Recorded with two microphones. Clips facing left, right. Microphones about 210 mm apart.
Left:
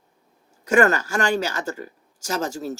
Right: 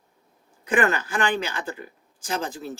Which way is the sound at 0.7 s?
45° left (ahead or behind).